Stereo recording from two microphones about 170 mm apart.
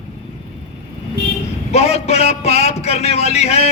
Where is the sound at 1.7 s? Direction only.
40° left (ahead or behind).